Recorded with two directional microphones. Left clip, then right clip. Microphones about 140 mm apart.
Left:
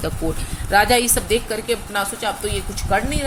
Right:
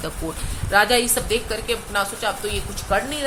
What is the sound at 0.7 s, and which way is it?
Speech, 35° left (ahead or behind).